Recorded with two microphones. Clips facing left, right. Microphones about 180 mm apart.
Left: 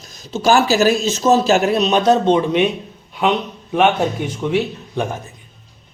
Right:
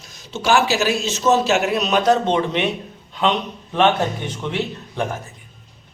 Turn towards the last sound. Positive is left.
turn(degrees=15)  # may be behind; listen again after turning